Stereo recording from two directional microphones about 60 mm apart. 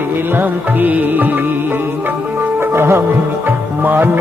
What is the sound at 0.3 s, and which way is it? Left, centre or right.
Music, right.